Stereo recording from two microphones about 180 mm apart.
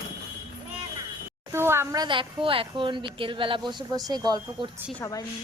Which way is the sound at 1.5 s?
15° right (ahead or behind).